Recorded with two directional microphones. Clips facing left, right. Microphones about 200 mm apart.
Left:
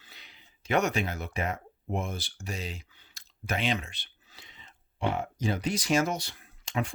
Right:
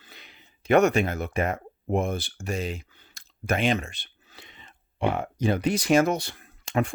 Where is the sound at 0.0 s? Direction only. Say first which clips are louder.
Right 5 dB; 50° right (ahead or behind).